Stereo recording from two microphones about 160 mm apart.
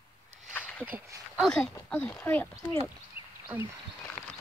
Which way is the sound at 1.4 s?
5° left (ahead or behind).